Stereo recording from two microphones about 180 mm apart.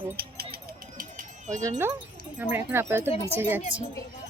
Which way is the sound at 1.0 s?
50° right (ahead or behind).